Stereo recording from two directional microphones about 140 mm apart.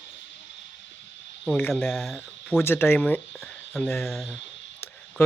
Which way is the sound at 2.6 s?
15° left (ahead or behind).